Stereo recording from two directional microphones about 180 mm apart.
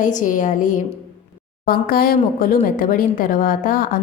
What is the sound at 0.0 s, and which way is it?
A woman's voice, 45° left (ahead or behind).